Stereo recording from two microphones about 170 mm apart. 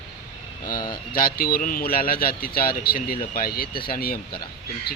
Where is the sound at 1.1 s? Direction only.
60° left (ahead or behind).